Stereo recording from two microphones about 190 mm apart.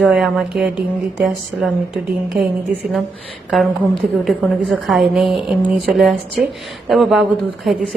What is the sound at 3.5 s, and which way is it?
A woman's voice, centre (ahead or behind).